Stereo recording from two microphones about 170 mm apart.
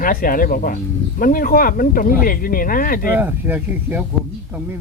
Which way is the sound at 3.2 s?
10° right (ahead or behind).